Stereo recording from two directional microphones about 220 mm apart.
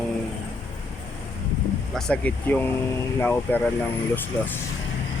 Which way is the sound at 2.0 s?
5° left (ahead or behind).